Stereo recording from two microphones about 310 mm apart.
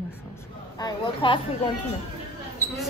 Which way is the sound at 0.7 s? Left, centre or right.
Centre.